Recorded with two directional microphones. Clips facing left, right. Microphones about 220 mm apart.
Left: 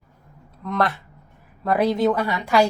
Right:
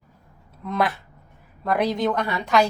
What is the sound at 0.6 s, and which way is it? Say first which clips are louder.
A woman's voice: left 1 dB; 5° right (ahead or behind).